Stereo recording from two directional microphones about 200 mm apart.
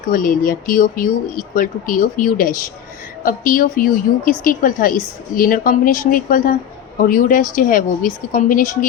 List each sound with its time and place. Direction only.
0.1 s a woman's voice: 45° left (ahead or behind)